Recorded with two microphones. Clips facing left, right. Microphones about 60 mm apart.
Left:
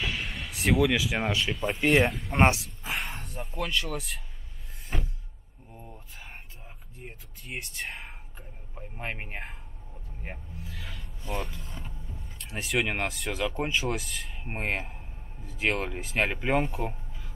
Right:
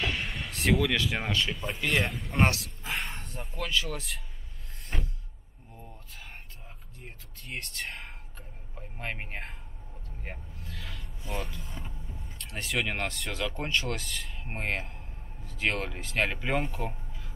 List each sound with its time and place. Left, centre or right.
0.0 s speech: centre
2.3 s speech: centre
2.6 s speech: centre
4.9 s a sound: centre
7.0 s whispering: centre
10.2 s vehicle: centre
12.4 s speech: centre
16.9 s a sound: centre